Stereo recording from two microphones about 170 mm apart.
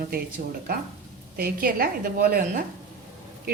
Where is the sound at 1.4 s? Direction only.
60° right (ahead or behind).